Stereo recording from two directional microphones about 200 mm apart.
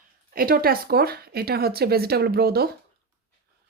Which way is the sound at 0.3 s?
50° right (ahead or behind).